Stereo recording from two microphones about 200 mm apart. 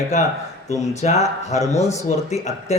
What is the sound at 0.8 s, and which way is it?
Speech, 35° left (ahead or behind).